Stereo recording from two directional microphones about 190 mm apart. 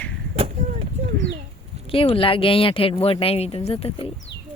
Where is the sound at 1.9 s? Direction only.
30° left (ahead or behind).